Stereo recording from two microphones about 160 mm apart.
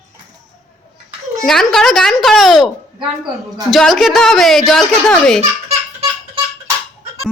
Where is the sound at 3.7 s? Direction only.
Centre (ahead or behind).